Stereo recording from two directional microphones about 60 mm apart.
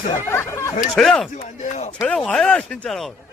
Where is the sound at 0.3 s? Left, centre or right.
Left.